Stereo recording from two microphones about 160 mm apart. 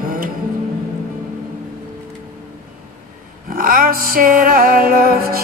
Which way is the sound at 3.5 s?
65° right (ahead or behind).